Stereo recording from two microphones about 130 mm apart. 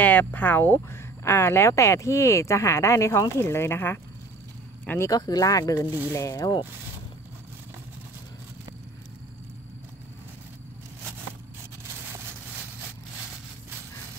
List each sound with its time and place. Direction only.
0.0 s a man's voice: 15° left (ahead or behind)
5.1 s speech: 30° left (ahead or behind)
5.9 s speech: 15° right (ahead or behind)
6.1 s speech: 25° left (ahead or behind)